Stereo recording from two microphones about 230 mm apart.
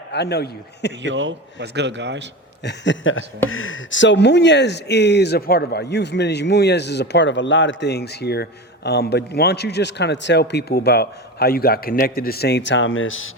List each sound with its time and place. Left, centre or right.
0.1 s speech: left
1.0 s a man's voice: right
2.6 s a sound: left
3.5 s speech: left